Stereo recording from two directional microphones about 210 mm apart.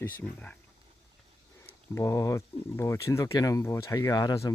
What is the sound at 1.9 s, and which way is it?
Speech, 15° left (ahead or behind).